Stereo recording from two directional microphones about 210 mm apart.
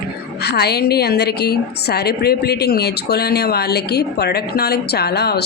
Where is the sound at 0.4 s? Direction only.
50° left (ahead or behind).